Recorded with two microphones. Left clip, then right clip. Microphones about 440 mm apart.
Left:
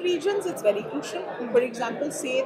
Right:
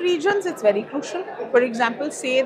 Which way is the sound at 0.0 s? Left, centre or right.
Right.